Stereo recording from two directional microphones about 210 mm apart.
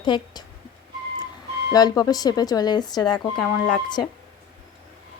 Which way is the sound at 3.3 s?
5° left (ahead or behind).